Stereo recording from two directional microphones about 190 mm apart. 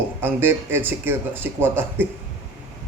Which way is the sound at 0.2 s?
10° right (ahead or behind).